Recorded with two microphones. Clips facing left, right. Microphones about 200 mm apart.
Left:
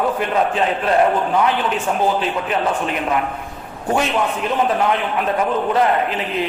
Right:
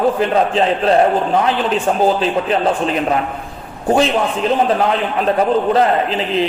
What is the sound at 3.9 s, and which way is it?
Speech, 30° right (ahead or behind).